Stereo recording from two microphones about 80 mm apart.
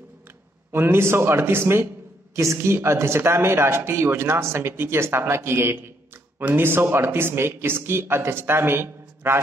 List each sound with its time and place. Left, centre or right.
0.7 s speech: right